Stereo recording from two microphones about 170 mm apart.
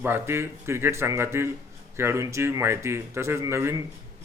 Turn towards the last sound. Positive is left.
turn(degrees=-15)  # may be behind; listen again after turning